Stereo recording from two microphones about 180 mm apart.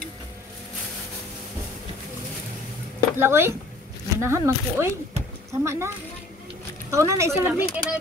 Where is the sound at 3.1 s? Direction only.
15° right (ahead or behind).